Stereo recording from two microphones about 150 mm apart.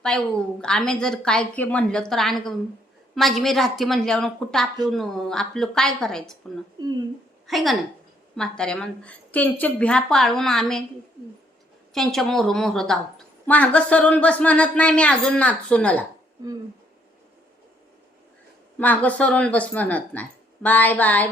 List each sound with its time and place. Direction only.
0.0 s a woman's voice: 5° left (ahead or behind)
6.7 s speech: 30° right (ahead or behind)
7.4 s a woman's voice: centre (ahead or behind)
11.9 s a woman's voice: 5° left (ahead or behind)
18.8 s a woman's voice: 10° left (ahead or behind)